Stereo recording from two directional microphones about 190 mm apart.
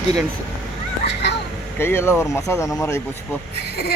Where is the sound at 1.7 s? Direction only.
10° left (ahead or behind).